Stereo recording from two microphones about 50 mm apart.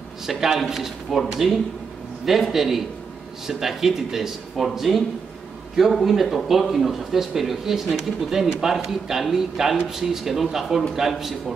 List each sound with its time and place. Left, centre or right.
0.3 s speech: centre
2.2 s speech: centre